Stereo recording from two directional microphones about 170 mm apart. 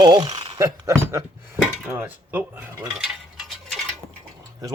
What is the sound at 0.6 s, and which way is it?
Speech, 15° right (ahead or behind).